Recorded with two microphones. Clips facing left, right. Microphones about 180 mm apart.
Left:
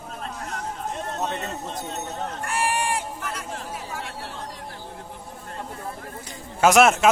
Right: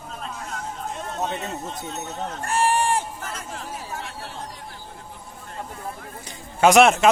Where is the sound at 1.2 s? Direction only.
10° right (ahead or behind).